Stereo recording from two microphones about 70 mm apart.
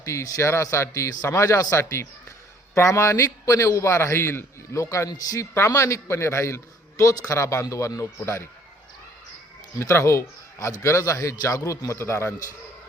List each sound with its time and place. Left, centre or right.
0.0 s a man's voice: left
1.8 s a man's voice: left
5.0 s speech: left
5.5 s a man's voice: left
9.9 s a man's voice: left